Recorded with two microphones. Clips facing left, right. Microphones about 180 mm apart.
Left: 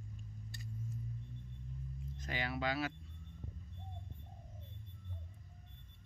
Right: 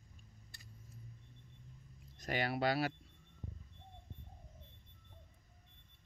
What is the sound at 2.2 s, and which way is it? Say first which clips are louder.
Speech: right 4 dB; 35° right (ahead or behind).